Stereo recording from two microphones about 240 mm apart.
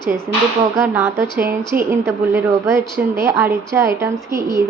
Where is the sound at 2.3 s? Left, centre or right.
Centre.